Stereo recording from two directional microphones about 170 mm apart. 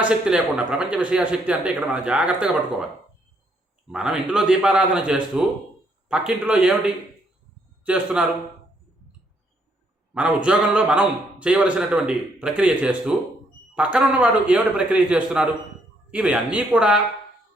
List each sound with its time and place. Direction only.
0.0 s speech: 5° right (ahead or behind)
3.9 s a man's voice: 5° right (ahead or behind)
10.2 s a man's voice: 5° right (ahead or behind)